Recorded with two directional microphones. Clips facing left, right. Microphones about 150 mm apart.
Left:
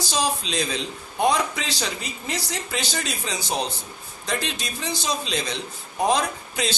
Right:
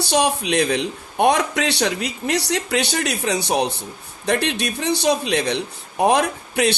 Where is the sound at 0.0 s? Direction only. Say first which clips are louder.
Right 6 dB; 65° right (ahead or behind).